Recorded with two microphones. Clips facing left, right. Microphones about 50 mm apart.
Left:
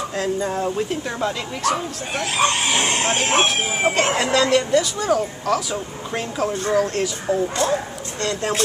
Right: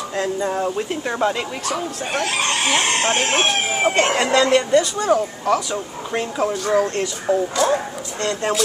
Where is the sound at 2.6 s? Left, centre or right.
Right.